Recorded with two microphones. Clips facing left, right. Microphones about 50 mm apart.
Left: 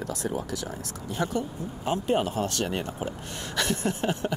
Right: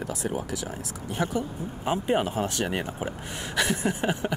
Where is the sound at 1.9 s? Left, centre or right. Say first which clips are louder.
Even; centre.